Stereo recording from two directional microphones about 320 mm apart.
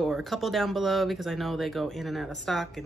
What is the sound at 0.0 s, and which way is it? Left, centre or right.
Speech, centre.